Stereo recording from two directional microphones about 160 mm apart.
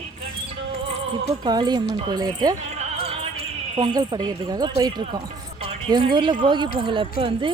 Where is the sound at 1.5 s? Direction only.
25° right (ahead or behind).